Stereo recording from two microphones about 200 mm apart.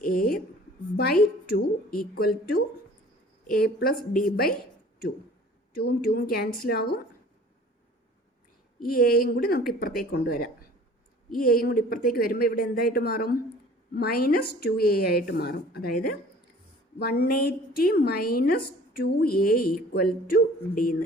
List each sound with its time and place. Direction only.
0.0 s a woman's voice: 45° left (ahead or behind)
5.7 s a woman's voice: 50° left (ahead or behind)
8.8 s a woman's voice: 50° left (ahead or behind)